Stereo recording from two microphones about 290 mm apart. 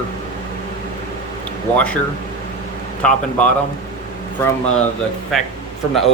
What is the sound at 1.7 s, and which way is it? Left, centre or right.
Speech, centre.